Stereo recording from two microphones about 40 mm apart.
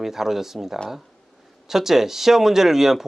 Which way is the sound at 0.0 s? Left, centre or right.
Centre.